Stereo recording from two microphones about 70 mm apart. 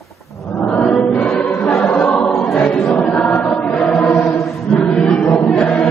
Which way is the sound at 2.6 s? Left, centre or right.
Centre.